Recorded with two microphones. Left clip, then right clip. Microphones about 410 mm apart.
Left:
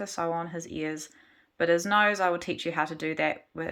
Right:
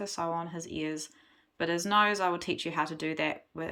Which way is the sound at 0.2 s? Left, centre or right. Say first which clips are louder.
Left 4 dB; centre.